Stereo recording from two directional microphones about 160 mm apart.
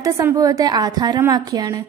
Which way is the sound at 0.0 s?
20° right (ahead or behind).